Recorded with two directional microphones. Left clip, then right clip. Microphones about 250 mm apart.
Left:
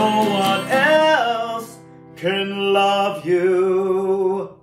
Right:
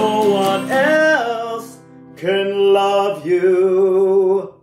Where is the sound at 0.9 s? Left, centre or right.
Left.